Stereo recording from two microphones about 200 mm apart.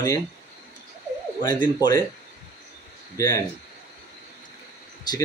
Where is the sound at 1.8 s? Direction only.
20° left (ahead or behind).